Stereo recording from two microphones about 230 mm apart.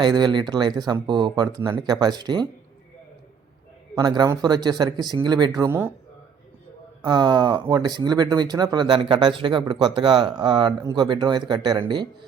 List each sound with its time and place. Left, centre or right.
0.0 s speech: centre
3.9 s speech: centre
7.0 s speech: centre